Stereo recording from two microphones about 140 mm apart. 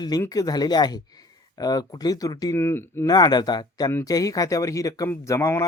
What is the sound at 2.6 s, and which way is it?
Speech, 15° left (ahead or behind).